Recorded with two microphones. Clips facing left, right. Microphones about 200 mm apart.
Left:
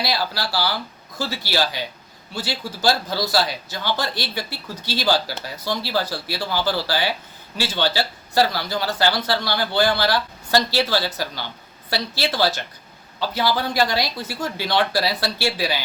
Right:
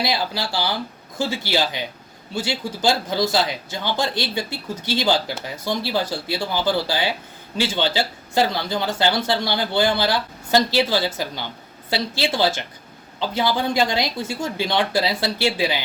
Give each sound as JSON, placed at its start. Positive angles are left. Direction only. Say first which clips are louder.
{"t": 0.0, "sound": "speech", "louder": "right 1 dB", "side_deg": -20}